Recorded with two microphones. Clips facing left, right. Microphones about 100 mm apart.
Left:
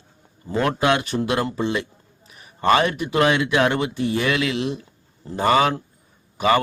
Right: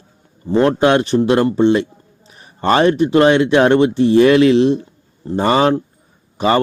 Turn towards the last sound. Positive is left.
turn(degrees=-30)  # may be behind; listen again after turning